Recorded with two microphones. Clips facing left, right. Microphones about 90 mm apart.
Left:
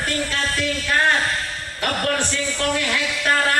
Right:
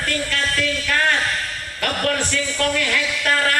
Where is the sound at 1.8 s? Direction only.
25° left (ahead or behind).